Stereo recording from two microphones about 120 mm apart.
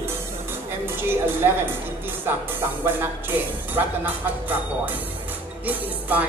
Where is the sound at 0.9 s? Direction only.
20° right (ahead or behind).